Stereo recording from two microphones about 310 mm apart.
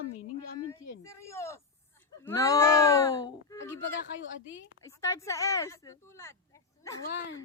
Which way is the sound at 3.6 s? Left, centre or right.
Left.